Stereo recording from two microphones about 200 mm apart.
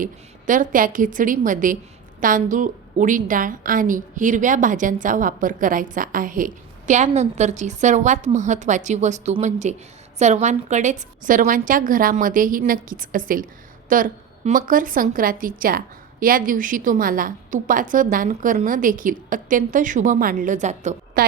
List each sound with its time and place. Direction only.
0.0 s a woman's voice: 40° right (ahead or behind)